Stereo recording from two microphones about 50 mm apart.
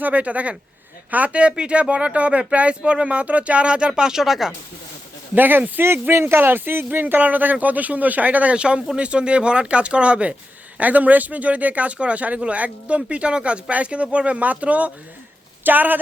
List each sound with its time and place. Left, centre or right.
0.0 s speech: right; by 4.5 s centre
5.3 s speech: right
5.8 s speech: right
8.5 s speech: right